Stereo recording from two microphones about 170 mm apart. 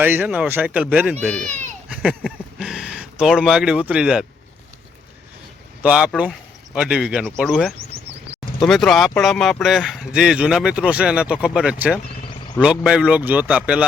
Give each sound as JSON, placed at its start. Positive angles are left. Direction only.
{"t": 0.0, "sound": "speech", "side_deg": -10}
{"t": 1.5, "sound": "speech", "side_deg": -45}
{"t": 1.9, "sound": "speech", "side_deg": -5}
{"t": 5.8, "sound": "speech", "side_deg": -5}